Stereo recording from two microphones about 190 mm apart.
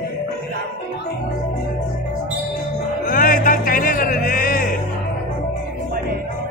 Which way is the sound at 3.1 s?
45° left (ahead or behind).